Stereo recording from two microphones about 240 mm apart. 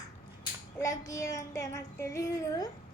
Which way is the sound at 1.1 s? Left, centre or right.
Centre.